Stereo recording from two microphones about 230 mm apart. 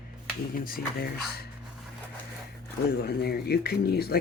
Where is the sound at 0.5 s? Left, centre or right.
Left.